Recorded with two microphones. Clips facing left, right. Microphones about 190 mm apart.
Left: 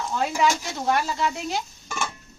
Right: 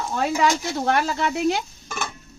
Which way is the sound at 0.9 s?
65° right (ahead or behind).